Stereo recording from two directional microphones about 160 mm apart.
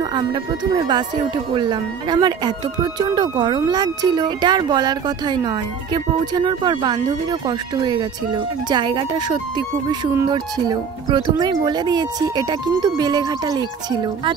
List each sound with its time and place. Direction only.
0.0 s speech: 30° right (ahead or behind)